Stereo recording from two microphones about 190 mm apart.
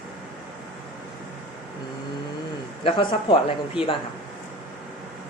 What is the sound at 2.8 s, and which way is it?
Speech, 25° left (ahead or behind).